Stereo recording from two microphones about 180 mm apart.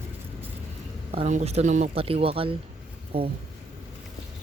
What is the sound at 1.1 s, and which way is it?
Speech, 40° right (ahead or behind).